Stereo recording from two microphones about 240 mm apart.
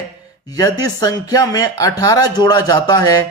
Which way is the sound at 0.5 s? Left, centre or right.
Centre.